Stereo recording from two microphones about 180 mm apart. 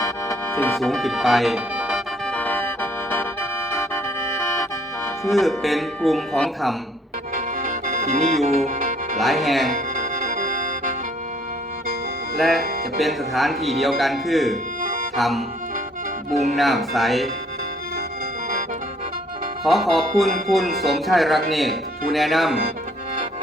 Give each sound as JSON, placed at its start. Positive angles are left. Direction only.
{"t": 0.0, "sound": "music", "side_deg": 15}
{"t": 2.2, "sound": "organ", "side_deg": 5}
{"t": 3.7, "sound": "music", "side_deg": 15}
{"t": 5.2, "sound": "speech", "side_deg": 0}
{"t": 7.3, "sound": "music", "side_deg": -45}
{"t": 9.1, "sound": "speech", "side_deg": 0}
{"t": 9.7, "sound": "music", "side_deg": -45}
{"t": 12.4, "sound": "speech", "side_deg": 0}
{"t": 14.8, "sound": "music", "side_deg": -45}
{"t": 15.1, "sound": "music", "side_deg": 0}
{"t": 16.6, "sound": "speech", "side_deg": 0}
{"t": 19.6, "sound": "speech", "side_deg": 0}